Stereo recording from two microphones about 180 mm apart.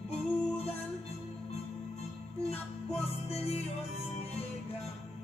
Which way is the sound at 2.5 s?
35° left (ahead or behind).